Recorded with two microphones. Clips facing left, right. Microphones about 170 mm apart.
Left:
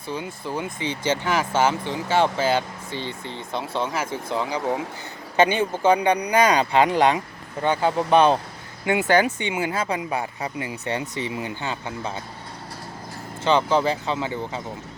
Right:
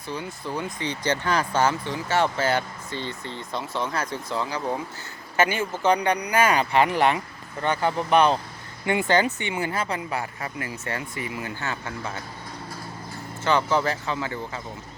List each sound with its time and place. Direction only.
0.4 s speech: 10° left (ahead or behind)
13.4 s speech: 20° left (ahead or behind)